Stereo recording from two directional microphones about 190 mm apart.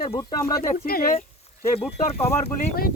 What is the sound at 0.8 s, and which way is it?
Speech, 50° left (ahead or behind).